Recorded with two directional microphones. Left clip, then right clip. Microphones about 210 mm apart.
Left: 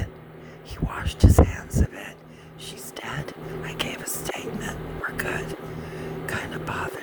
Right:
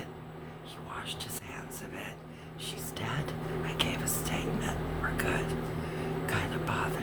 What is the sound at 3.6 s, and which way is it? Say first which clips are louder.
Whispering: left 2 dB; 20° left (ahead or behind).